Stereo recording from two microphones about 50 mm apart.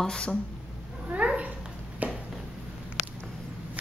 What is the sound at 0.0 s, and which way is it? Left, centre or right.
Speech, centre.